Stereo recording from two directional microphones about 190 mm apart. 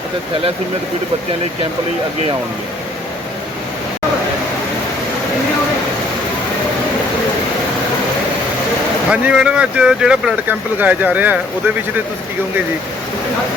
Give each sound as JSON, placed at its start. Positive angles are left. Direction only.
{"t": 9.0, "sound": "speech", "side_deg": -5}